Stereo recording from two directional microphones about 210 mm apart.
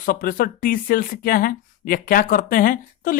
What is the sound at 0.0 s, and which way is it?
Speech, 45° left (ahead or behind).